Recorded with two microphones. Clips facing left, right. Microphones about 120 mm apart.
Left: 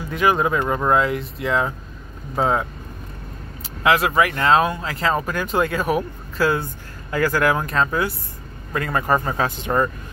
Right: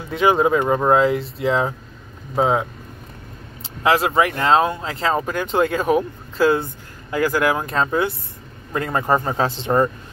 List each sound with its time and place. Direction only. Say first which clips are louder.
0.1 s speech: right 3 dB; 25° right (ahead or behind)
2.3 s speech: right 2 dB; 15° right (ahead or behind)
3.8 s speech: right 1 dB; 30° right (ahead or behind)